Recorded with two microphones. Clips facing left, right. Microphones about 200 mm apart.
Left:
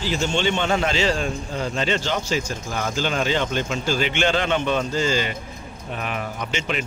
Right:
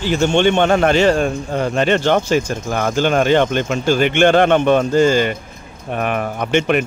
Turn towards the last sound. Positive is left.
turn(degrees=-60)  # may be behind; listen again after turning